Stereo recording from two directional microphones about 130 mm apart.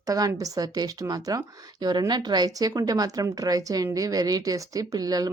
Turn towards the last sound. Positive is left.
turn(degrees=-30)  # may be behind; listen again after turning